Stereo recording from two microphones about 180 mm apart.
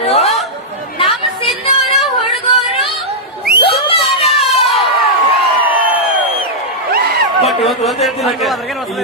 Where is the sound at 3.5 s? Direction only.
30° left (ahead or behind).